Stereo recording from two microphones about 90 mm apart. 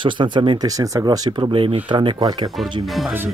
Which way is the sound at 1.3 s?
70° right (ahead or behind).